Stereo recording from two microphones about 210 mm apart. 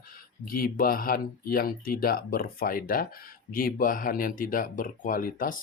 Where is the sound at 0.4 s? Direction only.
45° left (ahead or behind).